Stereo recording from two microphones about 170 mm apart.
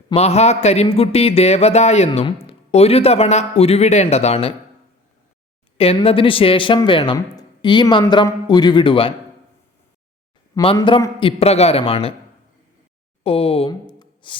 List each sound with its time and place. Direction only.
0.1 s a man's voice: 40° left (ahead or behind)
5.7 s speech: 35° left (ahead or behind)
10.5 s a man's voice: 30° left (ahead or behind)
13.2 s a man's voice: 35° left (ahead or behind)
14.0 s music: 30° left (ahead or behind)